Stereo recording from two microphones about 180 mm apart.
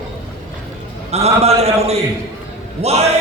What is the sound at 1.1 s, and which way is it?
A man's voice, 35° right (ahead or behind).